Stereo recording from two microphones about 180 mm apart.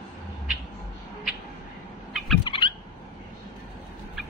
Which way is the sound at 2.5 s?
30° left (ahead or behind).